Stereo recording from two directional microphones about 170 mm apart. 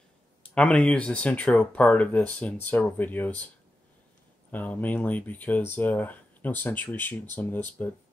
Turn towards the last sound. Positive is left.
turn(degrees=10)  # may be behind; listen again after turning